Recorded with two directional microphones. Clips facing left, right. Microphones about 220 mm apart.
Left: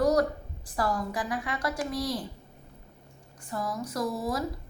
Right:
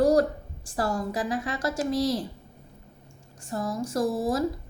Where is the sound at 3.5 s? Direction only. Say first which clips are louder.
Right 4 dB; 25° right (ahead or behind).